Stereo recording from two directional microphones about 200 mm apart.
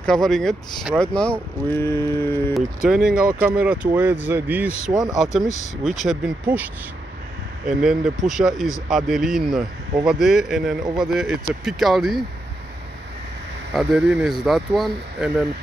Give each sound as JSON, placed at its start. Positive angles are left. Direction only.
{"t": 0.0, "sound": "speech", "side_deg": 5}
{"t": 2.5, "sound": "speech", "side_deg": -5}
{"t": 13.7, "sound": "speech", "side_deg": -5}